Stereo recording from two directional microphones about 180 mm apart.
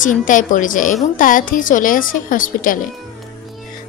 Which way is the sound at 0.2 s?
45° left (ahead or behind).